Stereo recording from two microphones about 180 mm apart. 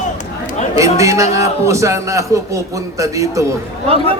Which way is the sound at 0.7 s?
15° right (ahead or behind).